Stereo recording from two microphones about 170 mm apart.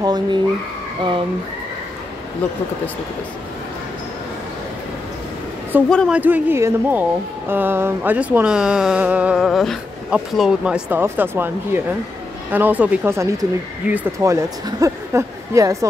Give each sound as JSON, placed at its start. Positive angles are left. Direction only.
{"t": 0.0, "sound": "speech", "side_deg": -25}
{"t": 5.9, "sound": "a woman's voice", "side_deg": 5}
{"t": 6.1, "sound": "speech", "side_deg": -10}